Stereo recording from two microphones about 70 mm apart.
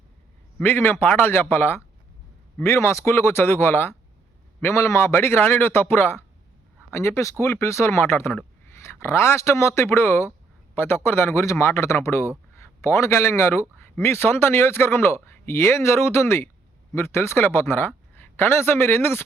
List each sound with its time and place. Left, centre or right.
0.6 s speech: left